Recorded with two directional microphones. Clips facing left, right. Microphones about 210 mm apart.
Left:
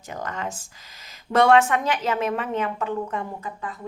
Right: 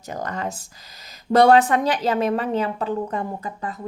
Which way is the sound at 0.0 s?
40° right (ahead or behind).